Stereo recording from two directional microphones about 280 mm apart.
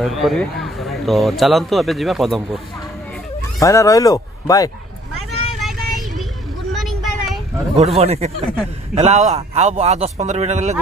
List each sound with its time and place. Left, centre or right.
0.0 s speech: centre
3.6 s speech: centre
5.6 s child singing: centre
6.7 s vehicle: centre
7.7 s a man's voice: right